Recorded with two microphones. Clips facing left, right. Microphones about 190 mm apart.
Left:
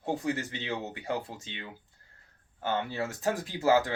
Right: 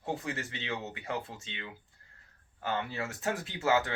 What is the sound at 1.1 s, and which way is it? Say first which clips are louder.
Speech: left 3 dB; 35° left (ahead or behind).